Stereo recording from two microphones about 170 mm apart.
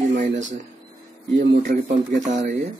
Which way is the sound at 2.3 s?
45° right (ahead or behind).